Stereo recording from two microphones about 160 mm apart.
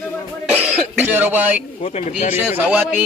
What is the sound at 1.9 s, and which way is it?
Speech, 45° left (ahead or behind).